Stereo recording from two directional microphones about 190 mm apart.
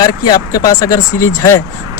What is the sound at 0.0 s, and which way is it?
Speech, 20° left (ahead or behind).